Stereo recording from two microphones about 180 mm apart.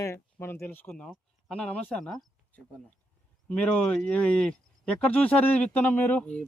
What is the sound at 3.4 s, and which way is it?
Speech, 5° left (ahead or behind).